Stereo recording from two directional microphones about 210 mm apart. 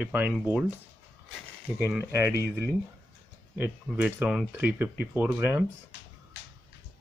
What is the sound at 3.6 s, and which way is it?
Speech, 5° right (ahead or behind).